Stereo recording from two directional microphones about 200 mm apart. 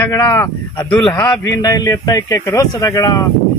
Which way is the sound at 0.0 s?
10° left (ahead or behind).